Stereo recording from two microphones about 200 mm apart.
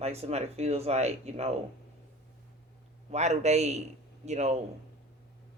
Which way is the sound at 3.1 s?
35° right (ahead or behind).